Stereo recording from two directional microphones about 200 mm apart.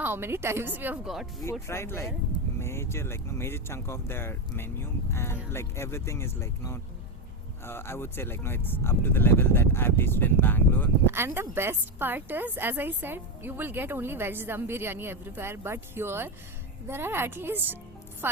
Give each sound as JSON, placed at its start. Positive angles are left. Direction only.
{"t": 0.0, "sound": "a woman's voice", "side_deg": -10}
{"t": 1.6, "sound": "speech", "side_deg": 10}
{"t": 11.1, "sound": "a woman's voice", "side_deg": -10}